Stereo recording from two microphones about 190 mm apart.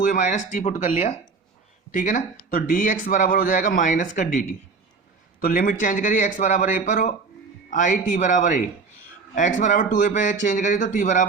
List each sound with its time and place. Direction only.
0.0 s speech: 45° left (ahead or behind)